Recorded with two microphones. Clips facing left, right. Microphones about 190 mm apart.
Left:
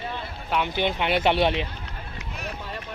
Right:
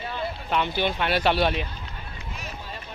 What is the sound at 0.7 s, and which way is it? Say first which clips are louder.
Speech: left 1 dB; 20° left (ahead or behind).